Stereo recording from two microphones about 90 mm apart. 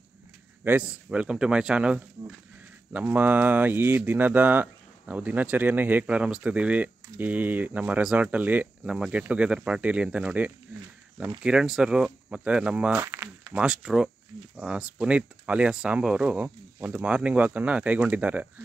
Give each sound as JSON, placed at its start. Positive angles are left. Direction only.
{"t": 0.7, "sound": "speech", "side_deg": -15}
{"t": 13.0, "sound": "a sound", "side_deg": -30}
{"t": 13.5, "sound": "speech", "side_deg": -10}